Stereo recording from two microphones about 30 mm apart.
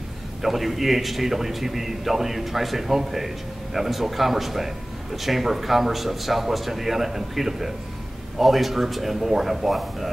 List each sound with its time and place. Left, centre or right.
0.4 s a man's voice: centre